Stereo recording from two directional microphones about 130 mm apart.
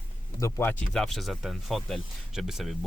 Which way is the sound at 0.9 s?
Centre (ahead or behind).